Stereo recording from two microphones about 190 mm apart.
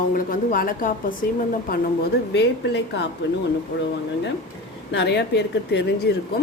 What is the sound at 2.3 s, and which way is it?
Speech, 65° left (ahead or behind).